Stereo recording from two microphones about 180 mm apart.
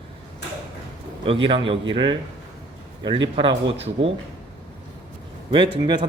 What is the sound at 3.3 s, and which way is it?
Speech, 30° right (ahead or behind).